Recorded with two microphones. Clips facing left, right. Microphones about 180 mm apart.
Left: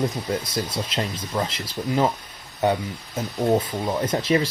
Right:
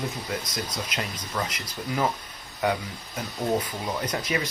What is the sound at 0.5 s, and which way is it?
Speech, 25° left (ahead or behind).